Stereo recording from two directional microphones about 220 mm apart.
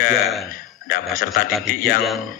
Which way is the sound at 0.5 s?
40° left (ahead or behind).